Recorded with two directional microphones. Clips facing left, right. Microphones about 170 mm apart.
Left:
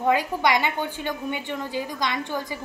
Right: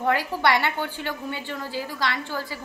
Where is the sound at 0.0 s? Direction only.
15° left (ahead or behind).